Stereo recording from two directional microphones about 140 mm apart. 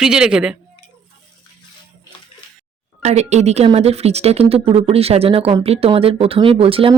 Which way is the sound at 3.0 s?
55° right (ahead or behind).